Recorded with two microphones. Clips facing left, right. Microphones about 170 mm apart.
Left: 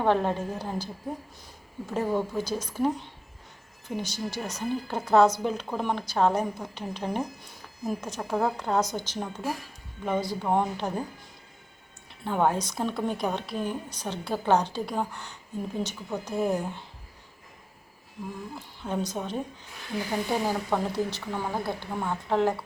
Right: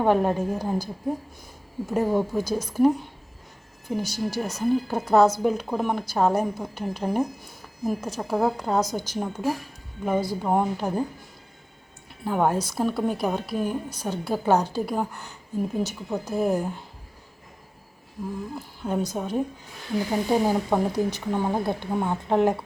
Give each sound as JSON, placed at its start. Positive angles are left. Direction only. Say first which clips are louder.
{"t": 0.0, "sound": "a woman's voice", "louder": "right 3 dB", "side_deg": -10}
{"t": 1.9, "sound": "a woman's voice", "louder": "right 4 dB", "side_deg": -10}
{"t": 12.2, "sound": "a woman's voice", "louder": "right 2 dB", "side_deg": -5}
{"t": 18.8, "sound": "a woman's voice", "louder": "right 3 dB", "side_deg": -10}